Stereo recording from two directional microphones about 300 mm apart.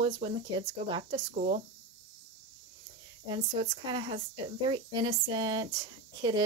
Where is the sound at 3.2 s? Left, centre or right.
Centre.